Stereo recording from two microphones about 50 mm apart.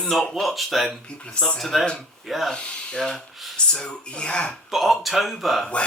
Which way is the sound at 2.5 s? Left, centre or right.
Left.